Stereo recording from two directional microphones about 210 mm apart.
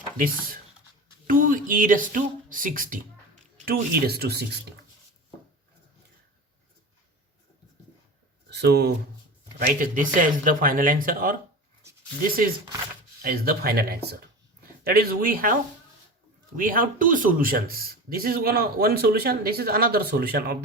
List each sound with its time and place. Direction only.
1.3 s a man's voice: 40° right (ahead or behind)
8.4 s speech: 55° right (ahead or behind)
13.2 s a man's voice: 45° right (ahead or behind)
16.6 s a man's voice: 40° right (ahead or behind)